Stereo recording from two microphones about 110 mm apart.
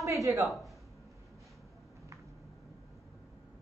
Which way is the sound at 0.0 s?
30° right (ahead or behind).